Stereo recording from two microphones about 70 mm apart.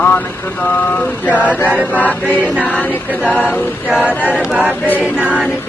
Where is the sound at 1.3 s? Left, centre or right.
Right.